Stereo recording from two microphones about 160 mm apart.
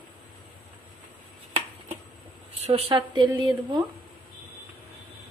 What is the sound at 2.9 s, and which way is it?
Speech, 30° right (ahead or behind).